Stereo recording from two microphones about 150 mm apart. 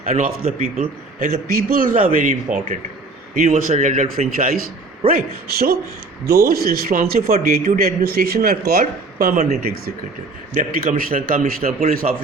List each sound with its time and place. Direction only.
0.1 s a man's voice: 65° right (ahead or behind)
5.0 s a man's voice: 80° right
9.5 s a man's voice: 90° right
10.5 s a man's voice: 65° right (ahead or behind)